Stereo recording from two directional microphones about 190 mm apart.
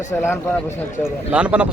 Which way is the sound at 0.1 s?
10° left (ahead or behind).